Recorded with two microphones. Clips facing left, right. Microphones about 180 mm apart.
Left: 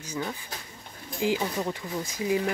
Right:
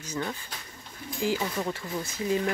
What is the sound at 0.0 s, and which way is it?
Speech, 10° left (ahead or behind).